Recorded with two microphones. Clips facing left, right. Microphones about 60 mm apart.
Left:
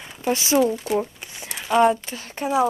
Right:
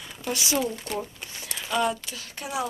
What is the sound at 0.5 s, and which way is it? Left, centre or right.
Speech, left.